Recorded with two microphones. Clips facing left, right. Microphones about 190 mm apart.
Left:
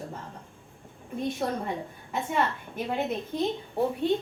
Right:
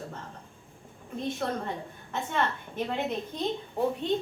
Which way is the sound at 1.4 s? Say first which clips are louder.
Left 2 dB; 15° left (ahead or behind).